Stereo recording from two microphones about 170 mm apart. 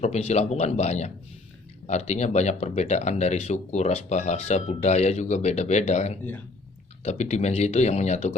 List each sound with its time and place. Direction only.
0.0 s speech: 40° left (ahead or behind)